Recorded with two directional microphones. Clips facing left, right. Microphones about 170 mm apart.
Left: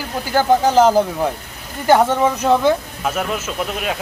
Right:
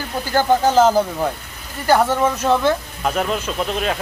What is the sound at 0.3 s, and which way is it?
Speech, 10° left (ahead or behind).